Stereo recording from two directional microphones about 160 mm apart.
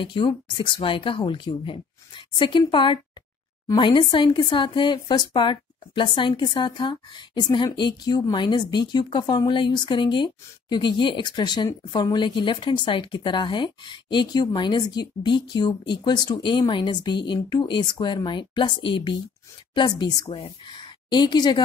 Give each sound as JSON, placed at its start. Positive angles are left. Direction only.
{"t": 0.0, "sound": "a woman's voice", "side_deg": 30}